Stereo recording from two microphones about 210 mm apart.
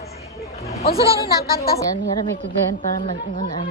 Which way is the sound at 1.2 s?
45° left (ahead or behind).